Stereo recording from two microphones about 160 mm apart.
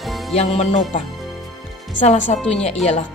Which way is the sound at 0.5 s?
45° left (ahead or behind).